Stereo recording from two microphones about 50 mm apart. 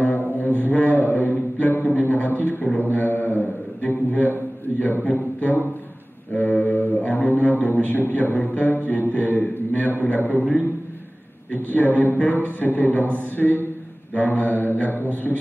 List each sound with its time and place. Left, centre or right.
0.4 s a man's voice: left
6.3 s mantra: left
13.0 s speech: right
13.4 s a sound: left
14.1 s mantra: left